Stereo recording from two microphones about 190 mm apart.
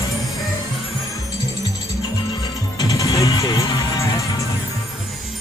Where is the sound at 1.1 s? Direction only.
20° left (ahead or behind).